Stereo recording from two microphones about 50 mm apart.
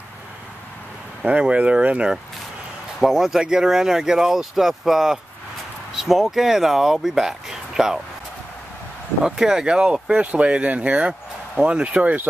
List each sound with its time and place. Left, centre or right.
1.2 s speech: right
3.0 s speech: centre
9.2 s speech: centre; by 12.2 s right